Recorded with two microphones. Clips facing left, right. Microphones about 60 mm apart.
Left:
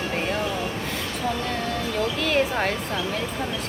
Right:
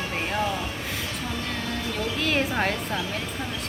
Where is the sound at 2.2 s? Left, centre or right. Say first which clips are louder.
Left 1 dB; centre.